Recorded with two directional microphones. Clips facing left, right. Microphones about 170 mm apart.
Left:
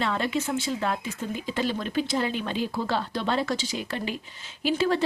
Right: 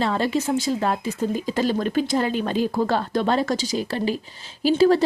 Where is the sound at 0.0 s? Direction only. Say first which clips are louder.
Right 5 dB; 35° right (ahead or behind).